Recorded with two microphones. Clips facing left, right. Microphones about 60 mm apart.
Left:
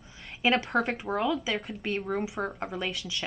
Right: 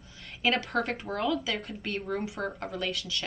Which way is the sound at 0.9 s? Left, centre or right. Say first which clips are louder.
Left 1 dB; centre.